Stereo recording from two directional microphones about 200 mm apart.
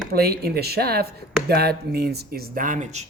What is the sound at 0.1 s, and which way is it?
Speech, 50° right (ahead or behind).